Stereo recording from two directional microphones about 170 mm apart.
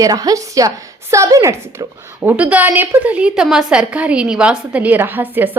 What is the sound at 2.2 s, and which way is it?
A woman's voice, 5° right (ahead or behind).